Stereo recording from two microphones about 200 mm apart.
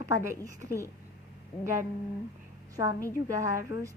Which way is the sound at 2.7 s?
15° right (ahead or behind).